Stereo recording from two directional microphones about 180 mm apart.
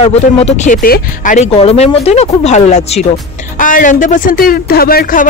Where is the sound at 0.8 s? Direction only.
50° left (ahead or behind).